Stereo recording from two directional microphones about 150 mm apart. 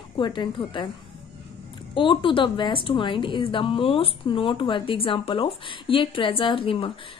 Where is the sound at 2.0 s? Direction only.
35° left (ahead or behind).